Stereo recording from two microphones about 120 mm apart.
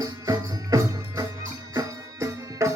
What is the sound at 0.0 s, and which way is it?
Music, 30° right (ahead or behind).